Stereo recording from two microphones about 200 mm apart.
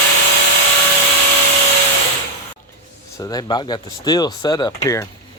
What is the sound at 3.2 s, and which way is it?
Speech, 20° left (ahead or behind).